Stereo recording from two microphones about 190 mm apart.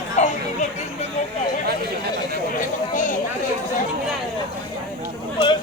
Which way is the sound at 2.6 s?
40° left (ahead or behind).